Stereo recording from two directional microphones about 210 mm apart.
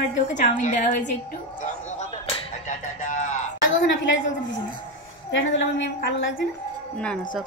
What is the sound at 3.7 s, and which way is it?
A woman's voice, 60° left (ahead or behind).